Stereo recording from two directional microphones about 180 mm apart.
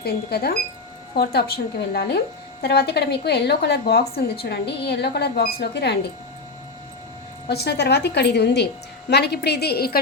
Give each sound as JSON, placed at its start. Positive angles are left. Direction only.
{"t": 0.0, "sound": "a woman's voice", "side_deg": 60}
{"t": 7.4, "sound": "a woman's voice", "side_deg": 65}